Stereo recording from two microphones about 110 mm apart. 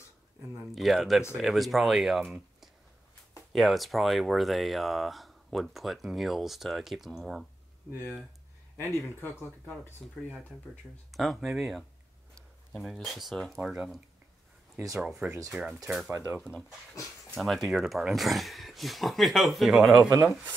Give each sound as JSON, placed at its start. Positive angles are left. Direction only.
{"t": 0.7, "sound": "speech", "side_deg": 0}
{"t": 8.7, "sound": "speech", "side_deg": 20}
{"t": 10.0, "sound": "speech", "side_deg": 0}
{"t": 15.0, "sound": "speech", "side_deg": -5}
{"t": 16.1, "sound": "speech", "side_deg": -30}
{"t": 17.4, "sound": "speech", "side_deg": 0}
{"t": 20.0, "sound": "speech", "side_deg": -35}